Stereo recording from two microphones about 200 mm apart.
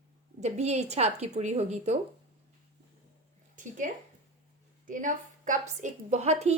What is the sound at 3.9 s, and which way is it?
A woman's voice, 45° right (ahead or behind).